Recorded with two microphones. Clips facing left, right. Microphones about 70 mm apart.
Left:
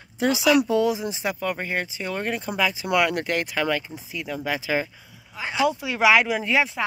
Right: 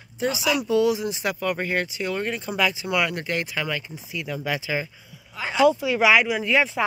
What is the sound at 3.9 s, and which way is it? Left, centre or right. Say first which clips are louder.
Speech: even; left.